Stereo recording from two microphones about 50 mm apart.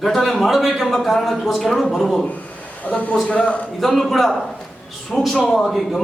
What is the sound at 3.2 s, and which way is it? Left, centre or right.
Speech, left.